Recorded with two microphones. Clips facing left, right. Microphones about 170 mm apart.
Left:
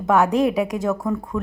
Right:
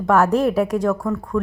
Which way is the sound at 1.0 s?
20° left (ahead or behind).